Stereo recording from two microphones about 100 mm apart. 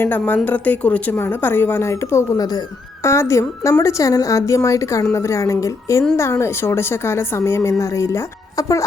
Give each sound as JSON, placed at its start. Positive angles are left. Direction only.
{"t": 0.0, "sound": "a woman's voice", "side_deg": 20}